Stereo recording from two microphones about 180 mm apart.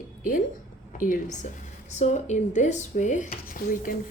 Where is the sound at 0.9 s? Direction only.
50° left (ahead or behind).